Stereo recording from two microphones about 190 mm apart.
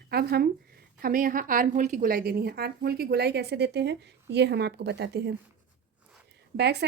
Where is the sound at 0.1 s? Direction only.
55° right (ahead or behind).